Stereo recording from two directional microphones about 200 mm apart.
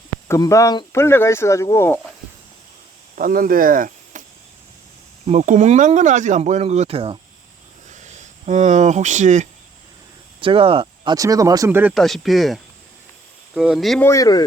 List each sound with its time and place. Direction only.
0.3 s speech: 15° left (ahead or behind)
3.2 s speech: 45° right (ahead or behind)
5.2 s speech: 35° right (ahead or behind)
10.4 s speech: 25° right (ahead or behind); by 14.1 s centre (ahead or behind)
14.1 s speech: 20° left (ahead or behind)